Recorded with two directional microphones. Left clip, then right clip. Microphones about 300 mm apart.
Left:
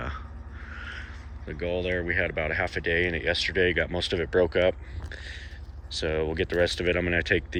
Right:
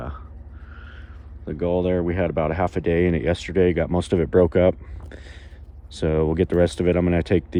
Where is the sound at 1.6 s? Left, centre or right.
Centre.